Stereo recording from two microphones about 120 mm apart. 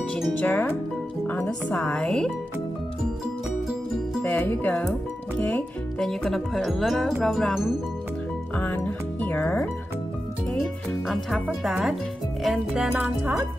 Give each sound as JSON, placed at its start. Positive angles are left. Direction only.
{"t": 0.4, "sound": "speech", "side_deg": 15}
{"t": 4.2, "sound": "speech", "side_deg": 15}
{"t": 8.5, "sound": "speech", "side_deg": 15}
{"t": 11.1, "sound": "speech", "side_deg": 0}
{"t": 13.2, "sound": "music", "side_deg": -15}